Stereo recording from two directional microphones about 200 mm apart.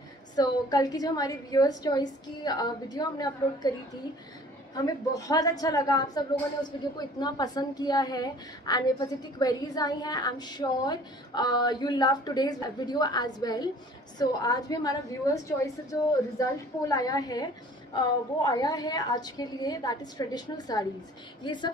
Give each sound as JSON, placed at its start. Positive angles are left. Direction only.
{"t": 0.4, "sound": "a woman's voice", "side_deg": 20}
{"t": 4.7, "sound": "a woman's voice", "side_deg": 15}